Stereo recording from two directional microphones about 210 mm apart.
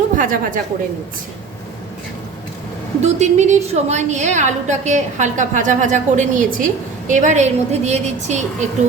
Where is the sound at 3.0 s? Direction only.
35° right (ahead or behind).